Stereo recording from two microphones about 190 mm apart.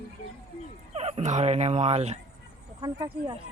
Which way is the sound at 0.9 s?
35° right (ahead or behind).